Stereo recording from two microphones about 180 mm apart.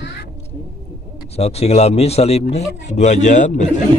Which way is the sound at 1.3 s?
35° left (ahead or behind).